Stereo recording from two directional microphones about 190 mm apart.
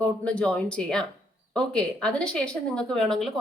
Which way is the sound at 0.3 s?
5° left (ahead or behind).